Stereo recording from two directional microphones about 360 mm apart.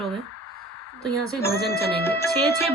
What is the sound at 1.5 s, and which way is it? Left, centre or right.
Music, left.